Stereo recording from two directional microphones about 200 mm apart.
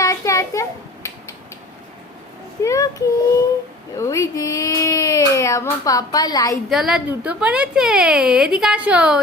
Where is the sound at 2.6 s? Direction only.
15° left (ahead or behind).